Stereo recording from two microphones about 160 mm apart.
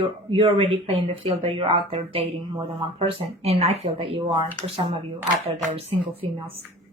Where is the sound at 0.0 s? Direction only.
35° right (ahead or behind).